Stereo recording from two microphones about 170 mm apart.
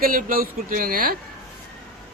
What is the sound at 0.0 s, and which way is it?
Speech, 55° right (ahead or behind).